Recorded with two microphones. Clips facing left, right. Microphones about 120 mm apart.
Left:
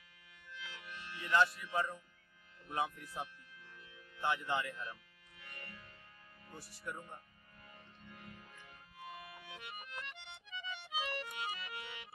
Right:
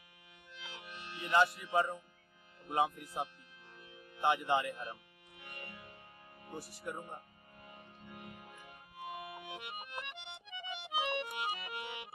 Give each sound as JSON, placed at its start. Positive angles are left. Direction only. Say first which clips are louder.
{"t": 0.5, "sound": "music", "louder": "even", "side_deg": -20}
{"t": 2.6, "sound": "speech", "louder": "right 5 dB", "side_deg": -15}
{"t": 3.7, "sound": "music", "louder": "right 6 dB", "side_deg": -20}
{"t": 6.4, "sound": "speech", "louder": "right 4 dB", "side_deg": -15}
{"t": 7.6, "sound": "music", "louder": "right 4 dB", "side_deg": -20}
{"t": 11.0, "sound": "accordion", "louder": "right 5 dB", "side_deg": -20}